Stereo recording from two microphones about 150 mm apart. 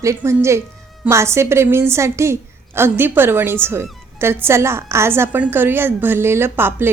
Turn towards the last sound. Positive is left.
turn(degrees=-15)  # may be behind; listen again after turning